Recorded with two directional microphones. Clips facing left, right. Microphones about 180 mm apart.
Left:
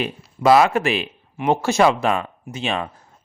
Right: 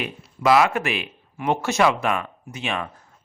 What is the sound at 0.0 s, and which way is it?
Speech, 30° left (ahead or behind).